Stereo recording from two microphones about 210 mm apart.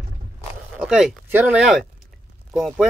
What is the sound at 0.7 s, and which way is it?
Speech, centre (ahead or behind).